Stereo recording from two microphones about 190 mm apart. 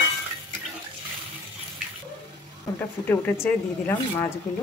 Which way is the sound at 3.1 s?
10° left (ahead or behind).